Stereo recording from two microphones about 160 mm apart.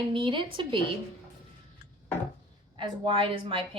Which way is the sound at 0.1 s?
30° right (ahead or behind).